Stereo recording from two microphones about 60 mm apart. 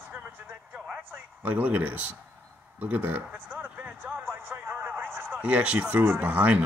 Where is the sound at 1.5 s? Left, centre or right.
Right.